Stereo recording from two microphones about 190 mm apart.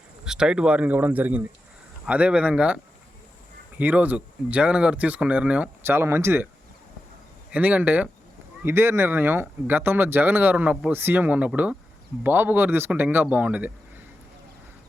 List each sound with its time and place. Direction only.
0.3 s speech: 5° right (ahead or behind)
3.8 s speech: 10° right (ahead or behind)
7.5 s speech: 10° right (ahead or behind)